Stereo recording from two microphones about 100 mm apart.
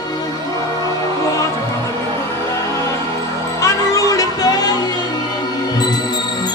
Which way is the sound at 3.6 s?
35° left (ahead or behind).